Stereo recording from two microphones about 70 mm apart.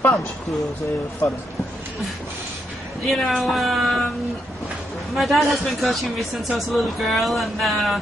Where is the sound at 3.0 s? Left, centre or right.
Centre.